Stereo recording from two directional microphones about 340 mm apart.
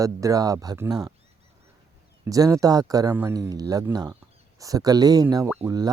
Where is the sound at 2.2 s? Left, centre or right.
Centre.